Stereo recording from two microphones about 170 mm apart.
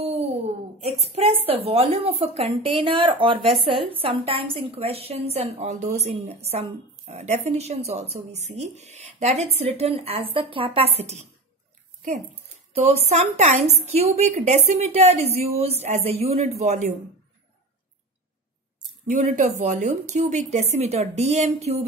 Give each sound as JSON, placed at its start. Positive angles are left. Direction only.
{"t": 0.0, "sound": "a woman's voice", "side_deg": -40}
{"t": 12.0, "sound": "speech", "side_deg": -50}
{"t": 12.8, "sound": "a woman's voice", "side_deg": -40}
{"t": 19.0, "sound": "a woman's voice", "side_deg": -45}